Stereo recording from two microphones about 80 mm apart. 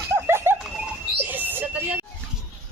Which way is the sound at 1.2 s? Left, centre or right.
Right.